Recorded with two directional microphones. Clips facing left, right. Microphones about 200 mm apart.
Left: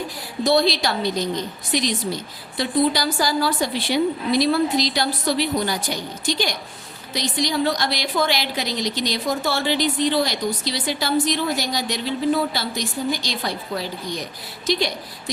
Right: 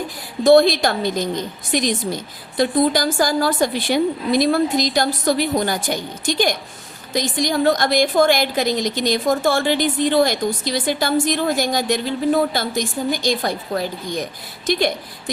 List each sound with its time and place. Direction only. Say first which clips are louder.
0.4 s a woman's voice: right 7 dB; 50° right (ahead or behind)